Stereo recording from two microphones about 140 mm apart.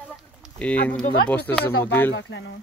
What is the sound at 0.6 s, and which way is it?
Speech, 10° left (ahead or behind).